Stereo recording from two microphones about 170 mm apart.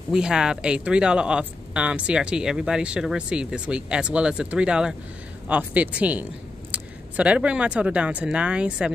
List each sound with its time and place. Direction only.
0.1 s speech: 5° right (ahead or behind)